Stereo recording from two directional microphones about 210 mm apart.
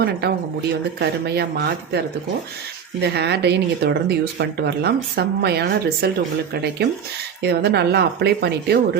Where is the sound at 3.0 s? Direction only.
50° right (ahead or behind).